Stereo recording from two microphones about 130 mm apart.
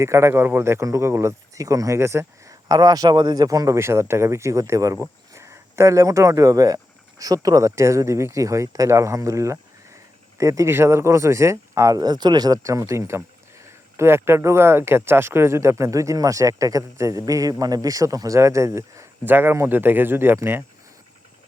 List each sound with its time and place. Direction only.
0.0 s speech: 20° right (ahead or behind)